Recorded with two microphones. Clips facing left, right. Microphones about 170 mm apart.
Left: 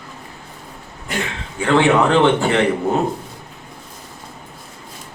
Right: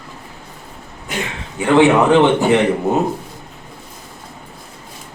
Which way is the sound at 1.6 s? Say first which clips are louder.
Right 3 dB; 15° right (ahead or behind).